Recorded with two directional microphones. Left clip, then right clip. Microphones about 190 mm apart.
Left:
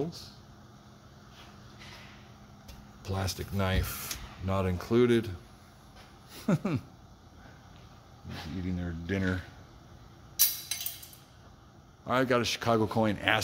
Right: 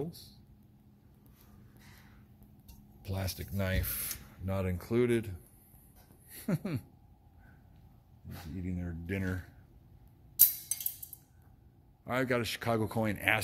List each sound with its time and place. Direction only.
0.0 s speech: centre (ahead or behind)
3.0 s speech: centre (ahead or behind)
6.3 s speech: 5° left (ahead or behind)
8.6 s speech: 5° right (ahead or behind)
12.1 s speech: 5° right (ahead or behind)